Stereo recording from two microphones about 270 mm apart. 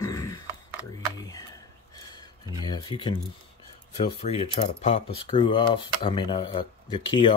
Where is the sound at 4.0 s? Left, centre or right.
Left.